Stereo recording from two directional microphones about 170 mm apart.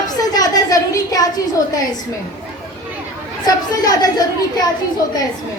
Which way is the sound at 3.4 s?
20° left (ahead or behind).